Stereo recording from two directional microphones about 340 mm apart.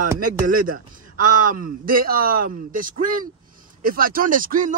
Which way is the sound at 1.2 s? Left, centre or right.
Right.